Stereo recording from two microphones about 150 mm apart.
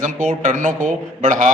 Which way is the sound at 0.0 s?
55° right (ahead or behind).